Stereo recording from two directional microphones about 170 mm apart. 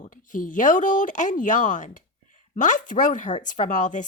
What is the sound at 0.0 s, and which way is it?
Speech, 50° left (ahead or behind).